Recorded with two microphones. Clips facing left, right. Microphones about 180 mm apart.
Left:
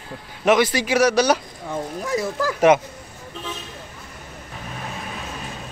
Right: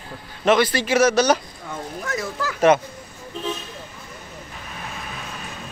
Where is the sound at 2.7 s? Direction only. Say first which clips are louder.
Even; 15° left (ahead or behind).